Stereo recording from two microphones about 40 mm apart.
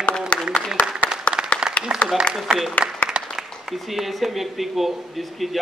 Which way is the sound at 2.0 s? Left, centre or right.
Left.